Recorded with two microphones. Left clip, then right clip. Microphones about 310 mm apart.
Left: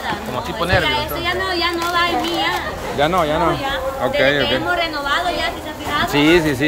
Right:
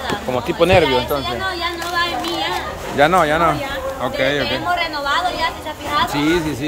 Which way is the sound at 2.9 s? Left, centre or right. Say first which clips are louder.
Right 3 dB; centre.